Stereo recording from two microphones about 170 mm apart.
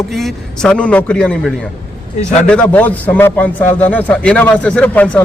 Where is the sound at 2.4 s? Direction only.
10° left (ahead or behind).